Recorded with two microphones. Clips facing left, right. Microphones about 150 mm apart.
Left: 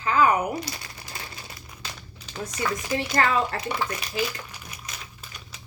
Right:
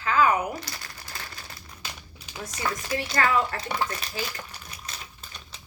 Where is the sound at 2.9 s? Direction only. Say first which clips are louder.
Left 1 dB; 20° left (ahead or behind).